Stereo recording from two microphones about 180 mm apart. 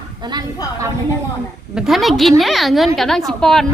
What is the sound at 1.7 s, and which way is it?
Speech, centre (ahead or behind).